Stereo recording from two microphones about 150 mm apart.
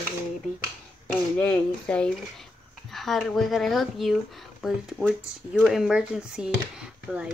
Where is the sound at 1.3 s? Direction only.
10° left (ahead or behind).